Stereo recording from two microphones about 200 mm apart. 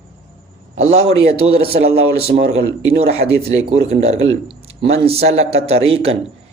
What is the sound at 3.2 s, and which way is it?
Speech, 50° right (ahead or behind).